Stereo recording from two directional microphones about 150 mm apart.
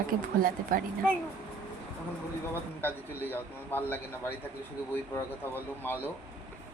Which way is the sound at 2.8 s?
15° left (ahead or behind).